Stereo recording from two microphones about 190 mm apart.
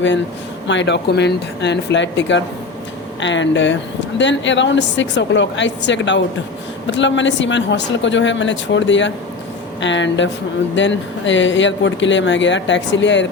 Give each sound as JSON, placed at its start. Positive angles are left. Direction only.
{"t": 0.7, "sound": "speech", "side_deg": 70}